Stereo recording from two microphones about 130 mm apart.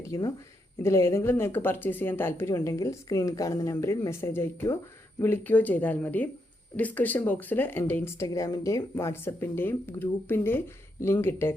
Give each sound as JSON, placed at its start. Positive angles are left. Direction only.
{"t": 0.1, "sound": "speech", "side_deg": 20}